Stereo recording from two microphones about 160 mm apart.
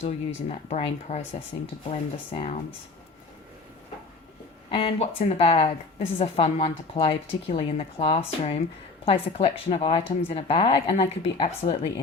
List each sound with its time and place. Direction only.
0.0 s speech: 45° left (ahead or behind)
4.7 s speech: 35° left (ahead or behind)